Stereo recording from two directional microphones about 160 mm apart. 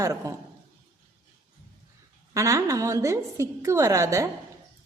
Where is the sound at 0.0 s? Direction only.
20° right (ahead or behind).